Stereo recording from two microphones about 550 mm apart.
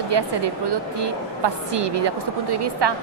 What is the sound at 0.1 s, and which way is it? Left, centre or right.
Speech, right.